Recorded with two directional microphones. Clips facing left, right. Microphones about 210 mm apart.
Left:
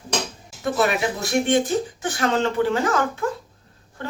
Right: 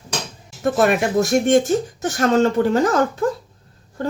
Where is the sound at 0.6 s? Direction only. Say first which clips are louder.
Right 4 dB; 50° right (ahead or behind).